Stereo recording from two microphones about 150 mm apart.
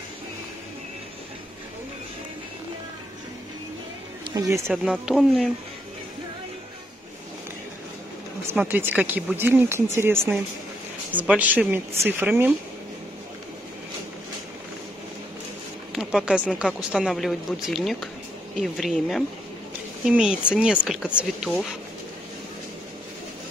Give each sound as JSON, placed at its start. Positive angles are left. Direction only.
{"t": 4.3, "sound": "speech", "side_deg": -20}
{"t": 4.8, "sound": "speech", "side_deg": 0}
{"t": 8.5, "sound": "speech", "side_deg": -15}
{"t": 15.9, "sound": "a sound", "side_deg": -5}
{"t": 16.5, "sound": "speech", "side_deg": -5}